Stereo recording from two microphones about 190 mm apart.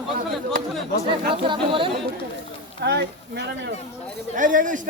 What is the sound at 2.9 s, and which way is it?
Speech, 60° right (ahead or behind).